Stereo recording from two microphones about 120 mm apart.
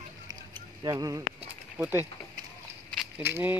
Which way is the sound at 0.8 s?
30° right (ahead or behind).